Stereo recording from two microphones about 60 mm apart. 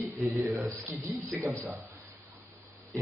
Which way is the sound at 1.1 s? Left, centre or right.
Right.